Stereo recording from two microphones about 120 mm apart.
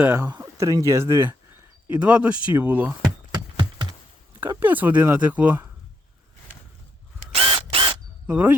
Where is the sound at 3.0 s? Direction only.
40° right (ahead or behind).